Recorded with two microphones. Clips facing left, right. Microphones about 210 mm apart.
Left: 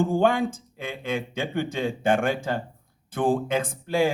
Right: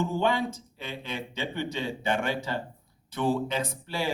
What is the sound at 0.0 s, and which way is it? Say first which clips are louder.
Speech: left 5 dB; 50° left (ahead or behind).